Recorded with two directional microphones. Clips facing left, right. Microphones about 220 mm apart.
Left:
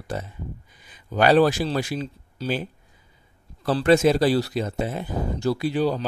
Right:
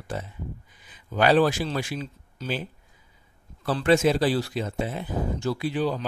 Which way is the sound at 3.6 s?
40° left (ahead or behind).